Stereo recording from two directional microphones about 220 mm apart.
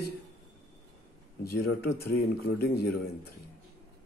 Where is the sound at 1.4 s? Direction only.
90° left.